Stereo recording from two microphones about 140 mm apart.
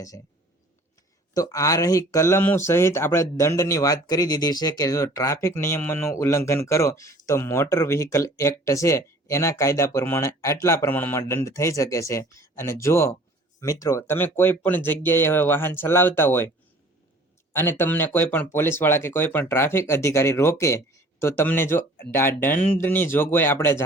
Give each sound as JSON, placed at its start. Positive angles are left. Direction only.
{"t": 1.3, "sound": "speech", "side_deg": 25}
{"t": 17.5, "sound": "speech", "side_deg": 15}